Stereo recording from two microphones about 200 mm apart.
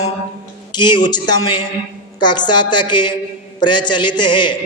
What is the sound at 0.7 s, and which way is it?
Speech, 20° left (ahead or behind).